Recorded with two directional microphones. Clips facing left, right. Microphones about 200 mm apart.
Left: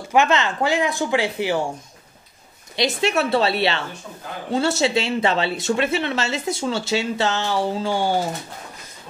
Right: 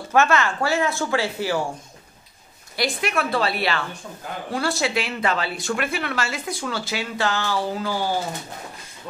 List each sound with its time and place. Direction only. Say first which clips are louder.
0.1 s speech: left 1 dB; 20° left (ahead or behind)
2.7 s speech: left 4 dB; 25° left (ahead or behind)